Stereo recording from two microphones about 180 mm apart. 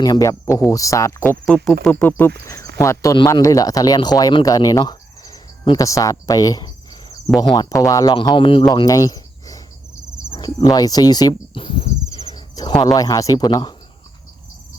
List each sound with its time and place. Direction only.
0.0 s speech: 20° left (ahead or behind)
12.3 s a sound: 20° left (ahead or behind)
12.7 s speech: 25° left (ahead or behind)